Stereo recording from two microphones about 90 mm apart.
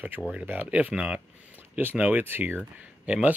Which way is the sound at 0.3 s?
20° right (ahead or behind).